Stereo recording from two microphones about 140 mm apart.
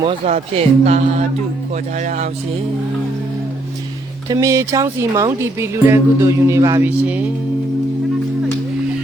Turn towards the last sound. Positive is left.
turn(degrees=-10)  # may be behind; listen again after turning